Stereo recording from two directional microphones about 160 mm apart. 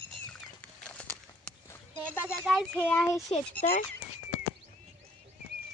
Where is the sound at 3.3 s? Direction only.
40° left (ahead or behind).